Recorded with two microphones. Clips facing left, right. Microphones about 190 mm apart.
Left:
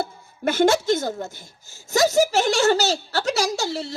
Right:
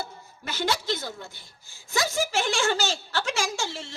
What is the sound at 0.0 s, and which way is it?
Speech, 50° left (ahead or behind).